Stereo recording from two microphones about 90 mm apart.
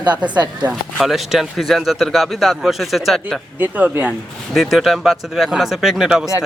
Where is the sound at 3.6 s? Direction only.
20° right (ahead or behind).